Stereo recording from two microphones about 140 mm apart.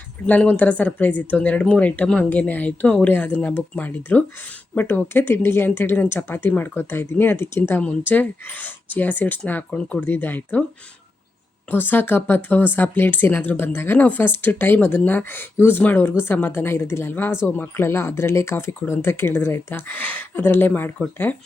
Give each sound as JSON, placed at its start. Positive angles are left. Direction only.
{"t": 0.3, "sound": "speech", "side_deg": 10}
{"t": 11.7, "sound": "speech", "side_deg": 15}